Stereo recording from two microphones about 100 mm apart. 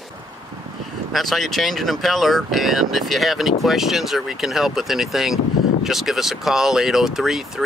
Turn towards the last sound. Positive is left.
turn(degrees=-5)  # may be behind; listen again after turning